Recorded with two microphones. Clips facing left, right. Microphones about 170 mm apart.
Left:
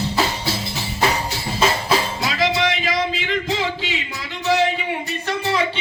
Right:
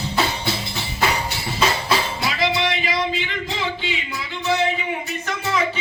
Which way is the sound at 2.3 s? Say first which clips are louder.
Left 2 dB; 90° left.